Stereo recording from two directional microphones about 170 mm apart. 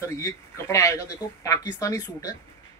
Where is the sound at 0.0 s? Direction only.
15° left (ahead or behind).